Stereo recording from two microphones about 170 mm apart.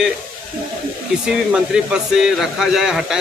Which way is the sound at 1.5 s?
5° right (ahead or behind).